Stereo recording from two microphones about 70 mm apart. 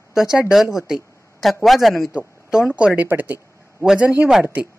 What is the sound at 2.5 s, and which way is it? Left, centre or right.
A woman's voice, centre.